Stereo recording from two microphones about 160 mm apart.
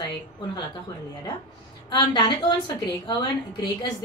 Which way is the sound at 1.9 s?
25° left (ahead or behind).